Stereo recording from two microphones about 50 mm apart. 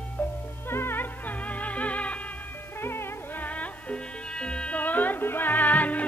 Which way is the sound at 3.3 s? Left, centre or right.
Left.